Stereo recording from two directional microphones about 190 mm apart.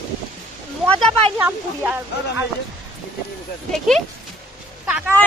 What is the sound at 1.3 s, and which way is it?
Speech, 10° right (ahead or behind).